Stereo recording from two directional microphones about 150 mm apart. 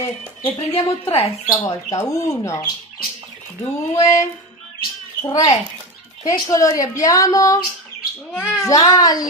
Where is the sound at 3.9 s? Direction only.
20° left (ahead or behind).